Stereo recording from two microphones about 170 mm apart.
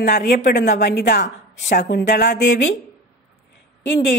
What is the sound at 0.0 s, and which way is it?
A woman's voice, 70° left (ahead or behind).